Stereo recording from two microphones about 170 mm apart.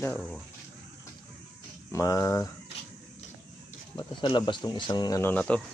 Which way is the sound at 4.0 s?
30° left (ahead or behind).